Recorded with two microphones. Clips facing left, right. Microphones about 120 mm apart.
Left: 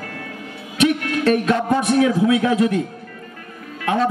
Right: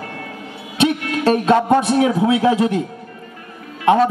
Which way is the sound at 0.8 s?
30° right (ahead or behind).